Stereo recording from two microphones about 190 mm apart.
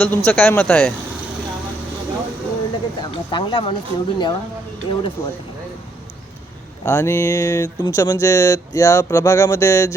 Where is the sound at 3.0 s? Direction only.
25° left (ahead or behind).